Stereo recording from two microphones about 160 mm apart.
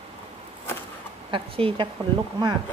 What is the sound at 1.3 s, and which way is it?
Speech, 35° right (ahead or behind).